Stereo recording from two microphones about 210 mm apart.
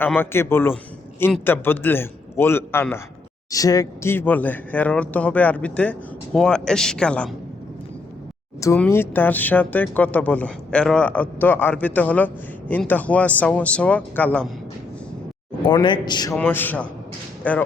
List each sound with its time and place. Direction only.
0.0 s speech: 10° left (ahead or behind)
8.6 s speech: 10° left (ahead or behind)
15.7 s speech: 20° left (ahead or behind)
16.3 s speech: 10° left (ahead or behind)